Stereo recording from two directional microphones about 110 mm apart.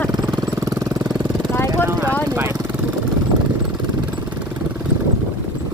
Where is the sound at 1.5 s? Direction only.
25° left (ahead or behind).